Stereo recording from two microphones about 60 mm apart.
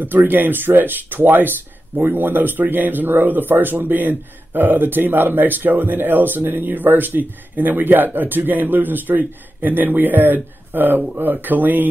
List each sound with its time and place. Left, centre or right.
0.0 s speech: right